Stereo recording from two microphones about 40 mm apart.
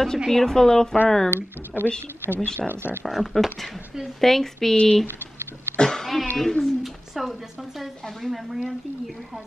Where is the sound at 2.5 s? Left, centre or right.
Right.